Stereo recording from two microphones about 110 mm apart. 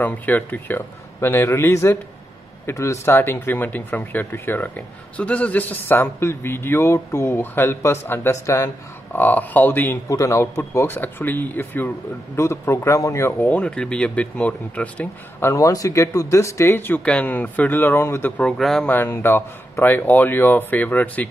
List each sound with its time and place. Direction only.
0.0 s speech: 15° left (ahead or behind)
9.1 s speech: 15° left (ahead or behind)
10.0 s speech: 30° left (ahead or behind)
13.4 s speech: 15° left (ahead or behind)
15.4 s speech: 30° left (ahead or behind)
18.4 s speech: 5° left (ahead or behind)
18.9 s speech: 20° left (ahead or behind)